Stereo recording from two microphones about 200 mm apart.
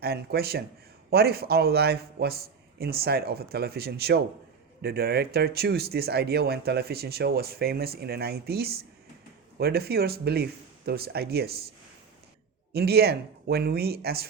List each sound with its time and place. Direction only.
0.0 s speech: 50° right (ahead or behind)
12.7 s speech: 50° right (ahead or behind)